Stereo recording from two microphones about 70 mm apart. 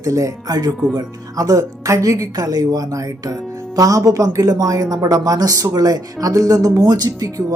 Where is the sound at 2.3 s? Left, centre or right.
Right.